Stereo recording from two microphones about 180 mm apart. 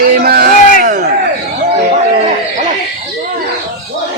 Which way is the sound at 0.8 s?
45° right (ahead or behind).